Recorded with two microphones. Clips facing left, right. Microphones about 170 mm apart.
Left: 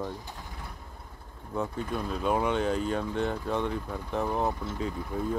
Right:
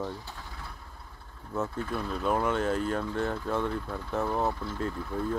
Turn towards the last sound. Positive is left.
turn(degrees=15)  # may be behind; listen again after turning